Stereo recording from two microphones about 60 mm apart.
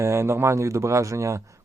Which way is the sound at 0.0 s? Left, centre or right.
Right.